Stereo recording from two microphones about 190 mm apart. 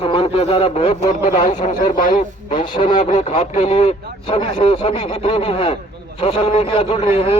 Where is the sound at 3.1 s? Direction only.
40° left (ahead or behind).